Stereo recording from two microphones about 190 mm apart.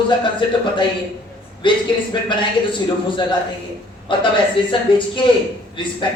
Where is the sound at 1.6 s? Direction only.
25° left (ahead or behind).